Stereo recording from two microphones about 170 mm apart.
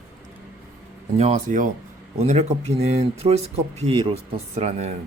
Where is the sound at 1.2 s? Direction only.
45° right (ahead or behind).